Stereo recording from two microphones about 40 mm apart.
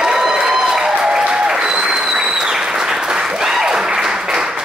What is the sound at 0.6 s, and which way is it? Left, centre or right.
Applause, centre.